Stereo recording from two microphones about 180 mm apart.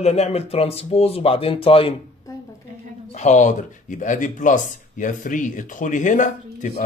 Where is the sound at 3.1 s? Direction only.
40° left (ahead or behind).